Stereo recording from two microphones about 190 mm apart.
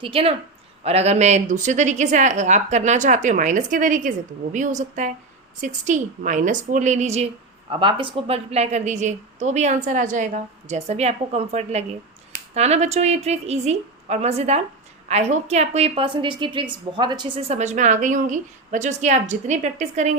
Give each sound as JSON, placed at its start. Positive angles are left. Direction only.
{"t": 0.0, "sound": "a woman's voice", "side_deg": -30}
{"t": 7.7, "sound": "a woman's voice", "side_deg": -25}